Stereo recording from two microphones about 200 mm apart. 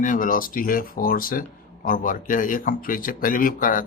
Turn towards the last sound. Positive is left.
turn(degrees=45)  # may be behind; listen again after turning